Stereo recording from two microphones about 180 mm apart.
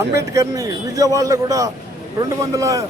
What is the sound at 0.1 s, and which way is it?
A man's voice, 15° right (ahead or behind).